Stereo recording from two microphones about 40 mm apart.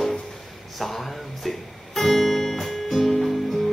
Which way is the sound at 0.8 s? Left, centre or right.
Centre.